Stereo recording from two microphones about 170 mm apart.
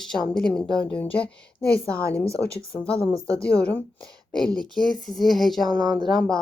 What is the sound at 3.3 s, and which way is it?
Speech, 5° left (ahead or behind).